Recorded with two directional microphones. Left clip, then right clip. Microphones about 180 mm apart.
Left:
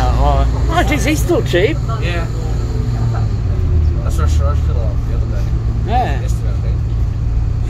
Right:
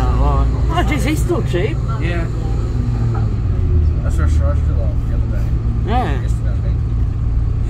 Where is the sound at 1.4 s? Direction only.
25° left (ahead or behind).